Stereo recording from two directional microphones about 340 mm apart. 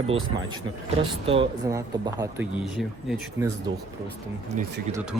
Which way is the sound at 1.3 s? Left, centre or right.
Centre.